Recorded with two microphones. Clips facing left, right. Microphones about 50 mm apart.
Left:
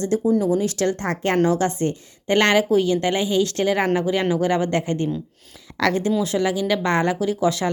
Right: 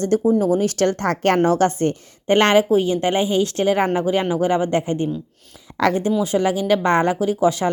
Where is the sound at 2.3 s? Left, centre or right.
Right.